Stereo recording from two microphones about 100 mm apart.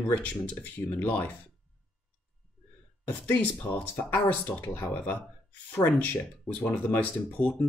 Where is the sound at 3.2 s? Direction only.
15° left (ahead or behind).